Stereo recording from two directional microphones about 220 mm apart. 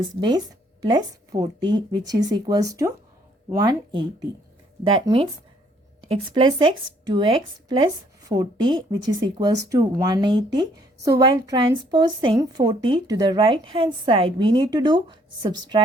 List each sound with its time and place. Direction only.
0.2 s a woman's voice: 20° right (ahead or behind)